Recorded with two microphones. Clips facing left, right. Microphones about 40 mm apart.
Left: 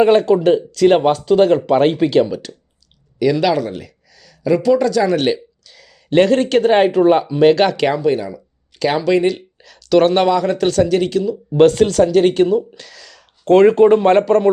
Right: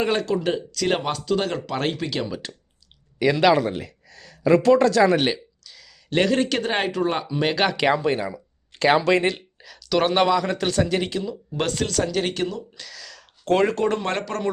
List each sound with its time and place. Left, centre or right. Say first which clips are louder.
0.0 s speech: left 11 dB; centre
3.2 s speech: left 2 dB; centre
5.2 s a sound: left 6 dB; centre
6.1 s speech: left 8 dB; centre
8.0 s speech: left 6 dB; right
9.6 s a man's voice: left 11 dB; centre
11.5 s speech: left 13 dB; centre